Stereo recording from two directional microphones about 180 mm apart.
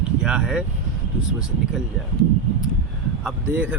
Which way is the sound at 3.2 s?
10° right (ahead or behind).